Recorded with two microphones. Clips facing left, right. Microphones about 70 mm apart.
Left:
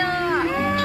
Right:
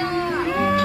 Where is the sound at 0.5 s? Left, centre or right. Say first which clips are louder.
Right 2 dB; centre.